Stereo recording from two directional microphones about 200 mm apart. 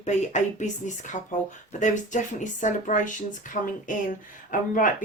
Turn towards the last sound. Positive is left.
turn(degrees=40)  # may be behind; listen again after turning